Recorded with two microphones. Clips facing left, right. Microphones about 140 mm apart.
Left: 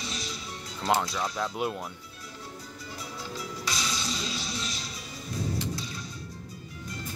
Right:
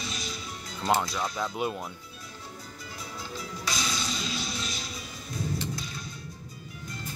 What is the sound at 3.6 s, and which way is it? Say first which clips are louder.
Music: right 2 dB; 35° left (ahead or behind).